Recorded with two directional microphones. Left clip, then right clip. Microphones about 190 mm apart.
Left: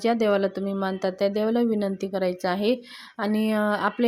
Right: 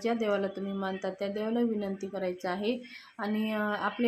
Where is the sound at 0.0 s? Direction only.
40° left (ahead or behind).